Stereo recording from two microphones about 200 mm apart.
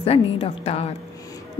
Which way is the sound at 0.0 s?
30° left (ahead or behind).